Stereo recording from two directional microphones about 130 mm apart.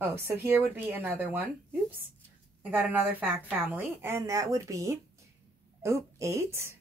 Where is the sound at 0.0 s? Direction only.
20° right (ahead or behind).